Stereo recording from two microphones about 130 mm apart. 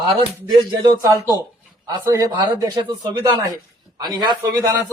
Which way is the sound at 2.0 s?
25° right (ahead or behind).